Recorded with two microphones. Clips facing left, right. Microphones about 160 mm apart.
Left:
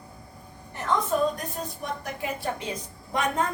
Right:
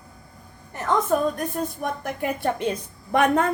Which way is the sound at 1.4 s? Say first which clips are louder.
Right 7 dB; 55° right (ahead or behind).